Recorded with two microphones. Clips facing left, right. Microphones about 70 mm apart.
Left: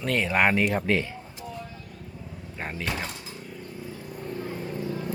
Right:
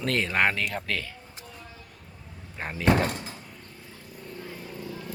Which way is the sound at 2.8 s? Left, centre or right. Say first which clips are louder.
Right 13 dB; right.